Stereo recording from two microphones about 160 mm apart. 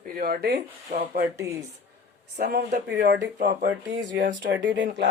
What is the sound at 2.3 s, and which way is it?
Speech, 80° right.